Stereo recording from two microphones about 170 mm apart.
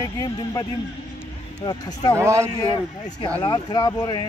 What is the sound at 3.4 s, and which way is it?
Speech, 25° left (ahead or behind).